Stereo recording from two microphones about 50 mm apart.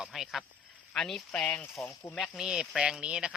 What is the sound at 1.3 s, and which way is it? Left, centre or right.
Speech, left.